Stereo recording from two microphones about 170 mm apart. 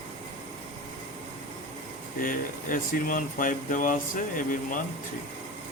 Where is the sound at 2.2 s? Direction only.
55° left (ahead or behind).